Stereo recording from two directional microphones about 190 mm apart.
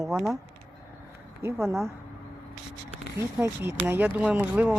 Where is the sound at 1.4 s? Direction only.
15° right (ahead or behind).